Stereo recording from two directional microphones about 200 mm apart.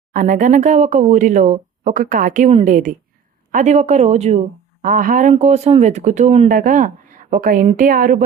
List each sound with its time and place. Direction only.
0.1 s a woman's voice: 40° right (ahead or behind)